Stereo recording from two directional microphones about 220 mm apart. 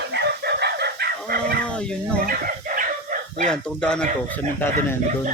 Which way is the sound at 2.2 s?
40° right (ahead or behind).